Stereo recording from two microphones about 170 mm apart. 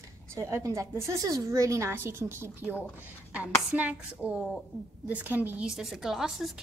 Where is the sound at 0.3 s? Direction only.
15° right (ahead or behind).